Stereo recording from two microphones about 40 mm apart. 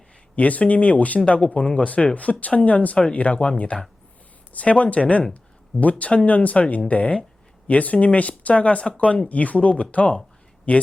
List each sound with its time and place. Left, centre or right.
0.3 s speech: left